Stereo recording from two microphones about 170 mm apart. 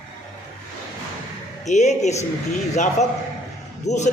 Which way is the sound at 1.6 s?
45° left (ahead or behind).